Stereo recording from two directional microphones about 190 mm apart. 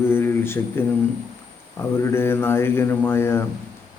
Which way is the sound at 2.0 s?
10° left (ahead or behind).